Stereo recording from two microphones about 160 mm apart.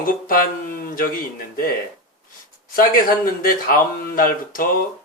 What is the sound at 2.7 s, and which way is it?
Speech, 60° left (ahead or behind).